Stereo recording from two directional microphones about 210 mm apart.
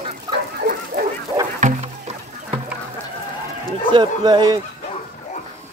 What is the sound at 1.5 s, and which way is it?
Music, 35° right (ahead or behind).